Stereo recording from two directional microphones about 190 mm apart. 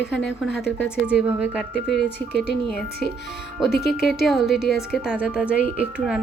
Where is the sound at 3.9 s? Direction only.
Centre (ahead or behind).